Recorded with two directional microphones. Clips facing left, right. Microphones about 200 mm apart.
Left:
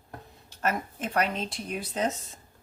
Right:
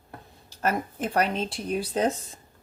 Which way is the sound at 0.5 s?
35° right (ahead or behind).